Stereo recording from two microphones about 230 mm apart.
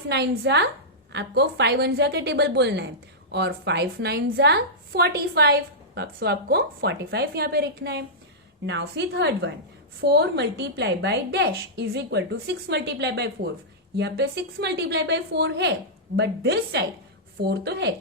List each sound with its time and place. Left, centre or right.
0.1 s a woman's voice: right